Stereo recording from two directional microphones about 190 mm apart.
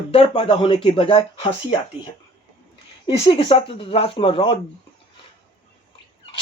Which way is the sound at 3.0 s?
30° left (ahead or behind).